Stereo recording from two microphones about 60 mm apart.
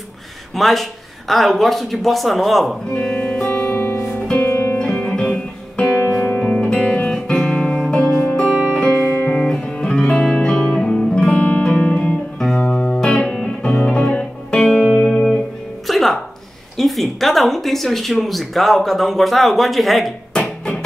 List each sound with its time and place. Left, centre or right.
0.6 s speech: centre
2.9 s speech: centre
3.2 s music: left
4.5 s music: left
5.9 s music: left
6.1 s music: centre
11.6 s guitar: centre
12.5 s music: centre
16.7 s speech: centre
20.3 s music: centre